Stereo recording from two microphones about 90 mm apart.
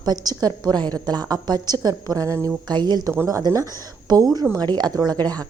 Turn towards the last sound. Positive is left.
turn(degrees=-45)  # may be behind; listen again after turning